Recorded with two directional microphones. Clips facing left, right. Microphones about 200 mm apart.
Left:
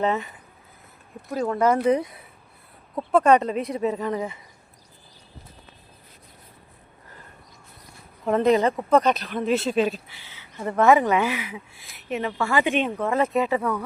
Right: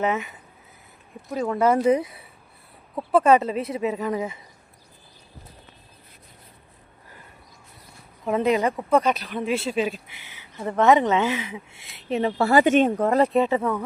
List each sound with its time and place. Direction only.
0.0 s speech: 20° right (ahead or behind)
1.3 s speech: 5° right (ahead or behind)
8.3 s speech: 10° right (ahead or behind); by 13.7 s 25° right (ahead or behind)